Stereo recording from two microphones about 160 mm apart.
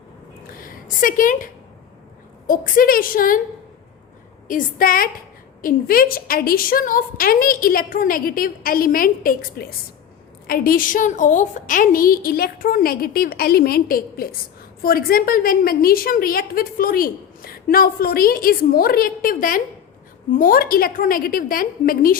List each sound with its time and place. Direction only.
0.5 s a sound: 60° left (ahead or behind)
2.5 s a woman's voice: 60° left (ahead or behind)
4.4 s a woman's voice: 60° left (ahead or behind)